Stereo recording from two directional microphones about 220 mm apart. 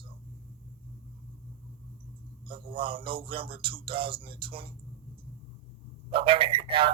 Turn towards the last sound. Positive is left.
turn(degrees=-25)  # may be behind; listen again after turning